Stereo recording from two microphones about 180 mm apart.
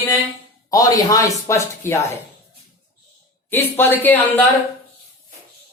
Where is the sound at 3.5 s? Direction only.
10° left (ahead or behind).